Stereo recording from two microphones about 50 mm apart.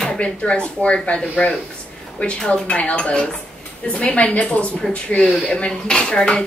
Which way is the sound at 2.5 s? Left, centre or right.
Left.